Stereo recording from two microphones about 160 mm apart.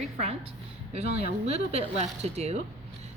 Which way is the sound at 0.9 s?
40° right (ahead or behind).